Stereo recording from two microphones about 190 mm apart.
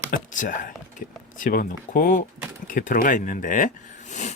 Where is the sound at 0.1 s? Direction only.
45° left (ahead or behind).